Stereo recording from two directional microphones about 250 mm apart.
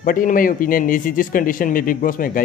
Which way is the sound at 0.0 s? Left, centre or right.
Left.